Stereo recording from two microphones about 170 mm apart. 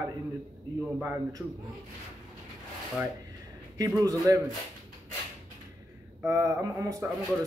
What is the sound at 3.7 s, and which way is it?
Speech, 20° right (ahead or behind).